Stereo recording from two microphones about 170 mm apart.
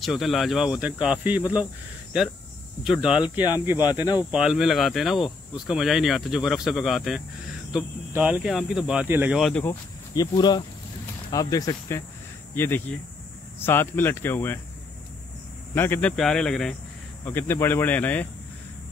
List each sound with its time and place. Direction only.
0.0 s speech: centre (ahead or behind)
2.8 s speech: 5° right (ahead or behind)
9.4 s speech: 5° left (ahead or behind)
10.1 s speech: 25° left (ahead or behind)
15.7 s speech: 10° left (ahead or behind)